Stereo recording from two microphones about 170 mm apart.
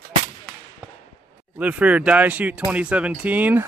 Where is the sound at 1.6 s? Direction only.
10° right (ahead or behind).